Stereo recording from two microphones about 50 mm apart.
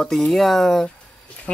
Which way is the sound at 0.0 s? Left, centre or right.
Centre.